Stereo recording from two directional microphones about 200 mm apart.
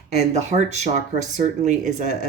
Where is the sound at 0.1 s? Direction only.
35° right (ahead or behind).